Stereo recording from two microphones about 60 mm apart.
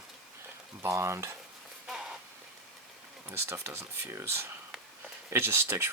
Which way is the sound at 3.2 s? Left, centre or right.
Right.